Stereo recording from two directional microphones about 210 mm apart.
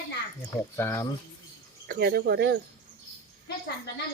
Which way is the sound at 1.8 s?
50° right (ahead or behind).